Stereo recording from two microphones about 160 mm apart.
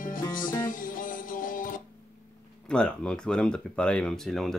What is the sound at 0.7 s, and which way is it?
Music, 60° left (ahead or behind).